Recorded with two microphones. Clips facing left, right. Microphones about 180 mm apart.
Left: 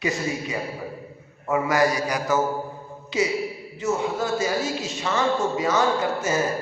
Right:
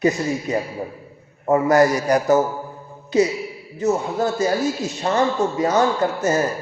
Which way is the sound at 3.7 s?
40° right (ahead or behind).